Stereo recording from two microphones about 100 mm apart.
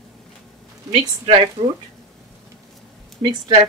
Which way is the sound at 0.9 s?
60° right (ahead or behind).